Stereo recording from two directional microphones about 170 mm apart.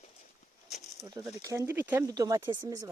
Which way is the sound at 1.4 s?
15° right (ahead or behind).